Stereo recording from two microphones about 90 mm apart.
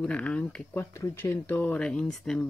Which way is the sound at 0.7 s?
30° left (ahead or behind).